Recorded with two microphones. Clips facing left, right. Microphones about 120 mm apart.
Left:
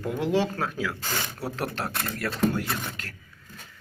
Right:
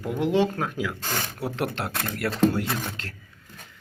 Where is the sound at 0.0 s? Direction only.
15° right (ahead or behind).